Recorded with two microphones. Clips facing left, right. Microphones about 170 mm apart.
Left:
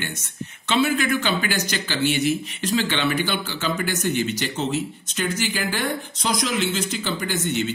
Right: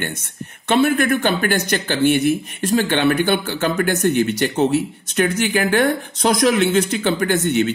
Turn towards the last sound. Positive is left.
turn(degrees=-60)  # may be behind; listen again after turning